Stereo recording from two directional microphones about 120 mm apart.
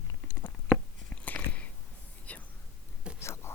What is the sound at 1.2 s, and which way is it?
Biting, 10° left (ahead or behind).